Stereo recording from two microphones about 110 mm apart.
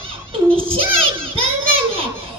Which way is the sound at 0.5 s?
60° right (ahead or behind).